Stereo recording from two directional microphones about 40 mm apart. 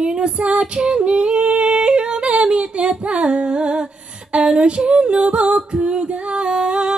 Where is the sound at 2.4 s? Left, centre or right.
Right.